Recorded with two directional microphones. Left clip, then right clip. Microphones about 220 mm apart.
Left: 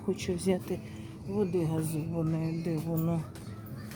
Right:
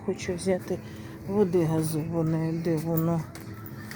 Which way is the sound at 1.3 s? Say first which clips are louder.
Right 6 dB; 20° right (ahead or behind).